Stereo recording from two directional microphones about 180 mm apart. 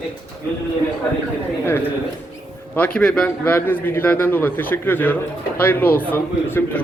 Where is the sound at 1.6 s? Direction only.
10° left (ahead or behind).